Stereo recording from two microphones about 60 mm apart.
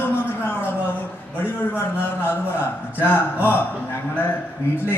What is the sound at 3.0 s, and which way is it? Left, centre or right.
Speech, left.